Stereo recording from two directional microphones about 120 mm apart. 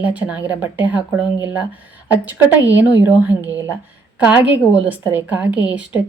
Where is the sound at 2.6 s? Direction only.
15° right (ahead or behind).